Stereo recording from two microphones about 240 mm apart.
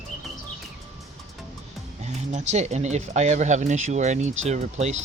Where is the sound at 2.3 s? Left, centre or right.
Right.